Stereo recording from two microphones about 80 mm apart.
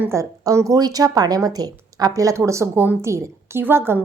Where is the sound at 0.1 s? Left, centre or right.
Right.